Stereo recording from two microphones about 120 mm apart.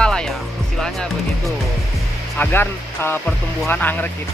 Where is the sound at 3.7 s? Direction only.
15° left (ahead or behind).